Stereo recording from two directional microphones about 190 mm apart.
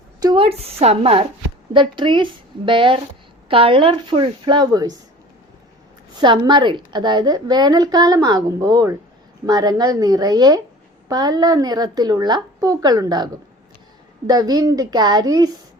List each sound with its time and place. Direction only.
0.2 s a woman's voice: 25° right (ahead or behind)
6.1 s a woman's voice: 25° right (ahead or behind)